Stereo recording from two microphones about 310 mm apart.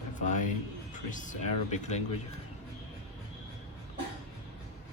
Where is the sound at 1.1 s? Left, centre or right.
Left.